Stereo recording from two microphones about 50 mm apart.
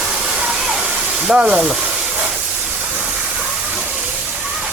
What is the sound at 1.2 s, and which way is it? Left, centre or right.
Speech, centre.